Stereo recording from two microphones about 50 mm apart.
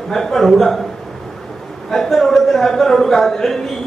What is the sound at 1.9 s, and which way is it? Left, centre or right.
Speech, centre.